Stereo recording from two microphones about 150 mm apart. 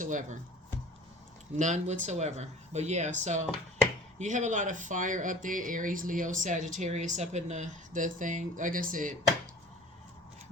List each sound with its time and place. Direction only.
0.0 s speech: 60° right (ahead or behind)
1.5 s speech: 55° right (ahead or behind)